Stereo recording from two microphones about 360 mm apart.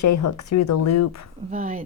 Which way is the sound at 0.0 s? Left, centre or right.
Left.